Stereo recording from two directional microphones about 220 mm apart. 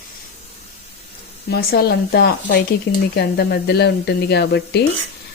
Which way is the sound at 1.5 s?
45° left (ahead or behind).